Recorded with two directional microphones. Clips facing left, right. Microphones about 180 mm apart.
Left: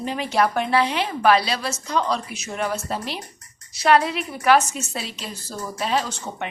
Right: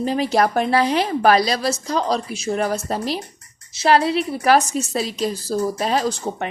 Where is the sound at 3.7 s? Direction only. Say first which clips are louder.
Right 2 dB; 30° right (ahead or behind).